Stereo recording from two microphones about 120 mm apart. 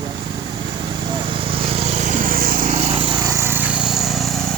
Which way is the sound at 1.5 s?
50° right (ahead or behind).